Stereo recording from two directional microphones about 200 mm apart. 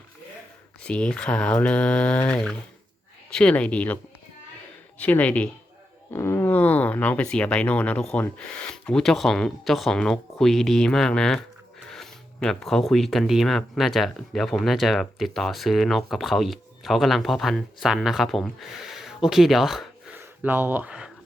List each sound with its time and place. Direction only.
0.8 s speech: 5° left (ahead or behind)
4.9 s speech: 5° left (ahead or behind)